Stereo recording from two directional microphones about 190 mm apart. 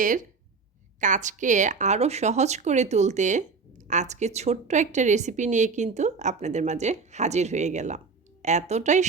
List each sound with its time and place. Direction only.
0.0 s speech: 45° right (ahead or behind)